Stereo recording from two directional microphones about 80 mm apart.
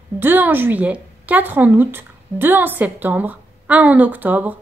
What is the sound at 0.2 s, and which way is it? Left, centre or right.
A woman's voice, right.